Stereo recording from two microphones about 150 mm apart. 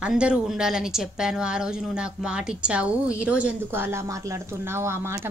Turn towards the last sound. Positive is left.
turn(degrees=-15)  # may be behind; listen again after turning